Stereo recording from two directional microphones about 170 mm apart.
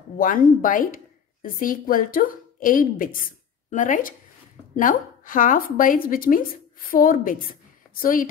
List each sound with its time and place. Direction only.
0.2 s a woman's voice: 55° left (ahead or behind)